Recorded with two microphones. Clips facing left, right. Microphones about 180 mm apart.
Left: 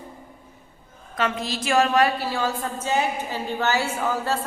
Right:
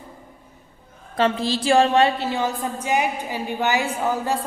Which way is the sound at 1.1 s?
30° right (ahead or behind).